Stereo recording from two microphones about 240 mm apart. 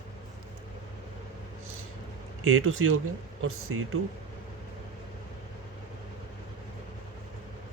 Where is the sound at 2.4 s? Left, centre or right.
Right.